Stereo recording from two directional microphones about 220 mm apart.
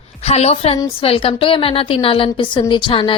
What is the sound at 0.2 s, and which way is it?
A woman's voice, 30° left (ahead or behind).